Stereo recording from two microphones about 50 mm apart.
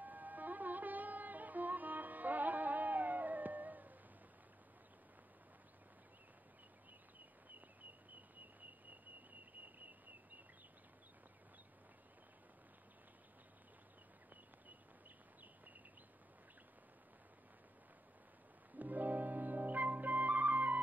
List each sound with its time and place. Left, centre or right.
0.0 s music: right
18.8 s flute: right